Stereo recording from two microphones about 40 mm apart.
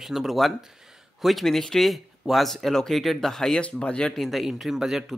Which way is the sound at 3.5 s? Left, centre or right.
Left.